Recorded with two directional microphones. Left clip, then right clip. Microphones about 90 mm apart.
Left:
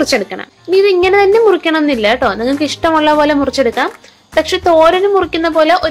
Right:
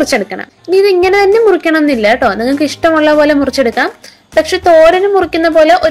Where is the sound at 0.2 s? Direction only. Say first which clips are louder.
Right 2 dB; 30° right (ahead or behind).